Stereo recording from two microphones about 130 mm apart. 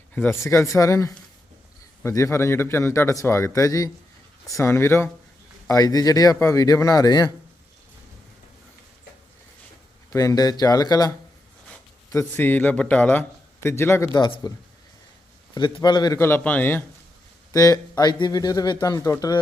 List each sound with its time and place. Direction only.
0.1 s speech: 10° left (ahead or behind)
0.4 s a man's voice: 20° left (ahead or behind)
10.1 s a man's voice: 25° left (ahead or behind)
12.1 s a man's voice: 15° left (ahead or behind)
14.1 s a man's voice: 35° left (ahead or behind)
15.5 s a man's voice: 35° left (ahead or behind)
16.1 s a man's voice: 20° left (ahead or behind)
17.5 s a man's voice: 25° left (ahead or behind)